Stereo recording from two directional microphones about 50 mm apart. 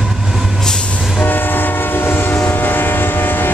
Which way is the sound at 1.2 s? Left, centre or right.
Left.